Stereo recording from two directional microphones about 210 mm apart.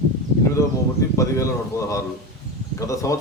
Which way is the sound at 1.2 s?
15° left (ahead or behind).